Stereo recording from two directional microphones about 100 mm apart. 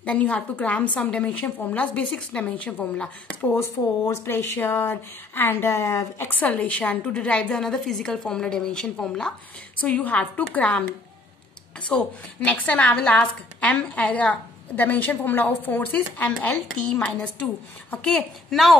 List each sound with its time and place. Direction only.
0.0 s speech: 15° left (ahead or behind)
3.5 s speech: 25° left (ahead or behind)
11.9 s a woman's voice: 10° left (ahead or behind)